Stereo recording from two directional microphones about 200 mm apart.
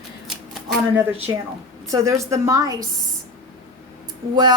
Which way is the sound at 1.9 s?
15° right (ahead or behind).